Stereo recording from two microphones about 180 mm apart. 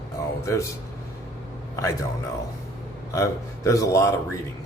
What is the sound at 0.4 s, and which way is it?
Speech, 15° left (ahead or behind).